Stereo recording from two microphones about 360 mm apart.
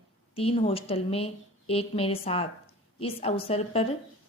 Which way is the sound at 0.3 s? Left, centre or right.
Centre.